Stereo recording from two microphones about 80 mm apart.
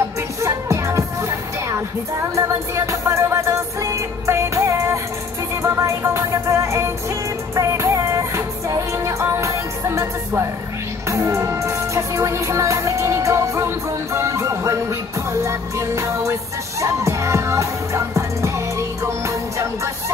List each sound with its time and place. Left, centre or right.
0.4 s music: right
2.3 s music: right